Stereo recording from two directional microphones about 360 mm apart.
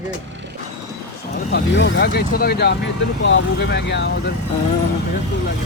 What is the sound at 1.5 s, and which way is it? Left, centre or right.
Speech, left.